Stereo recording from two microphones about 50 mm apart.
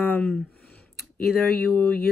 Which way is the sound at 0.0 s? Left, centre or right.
Left.